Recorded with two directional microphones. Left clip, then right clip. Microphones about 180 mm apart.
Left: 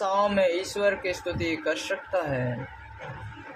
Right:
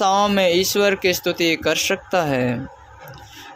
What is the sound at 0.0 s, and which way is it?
Speech, 40° right (ahead or behind).